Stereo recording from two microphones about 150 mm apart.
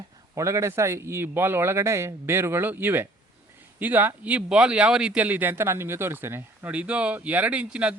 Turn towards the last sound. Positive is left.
turn(degrees=-10)  # may be behind; listen again after turning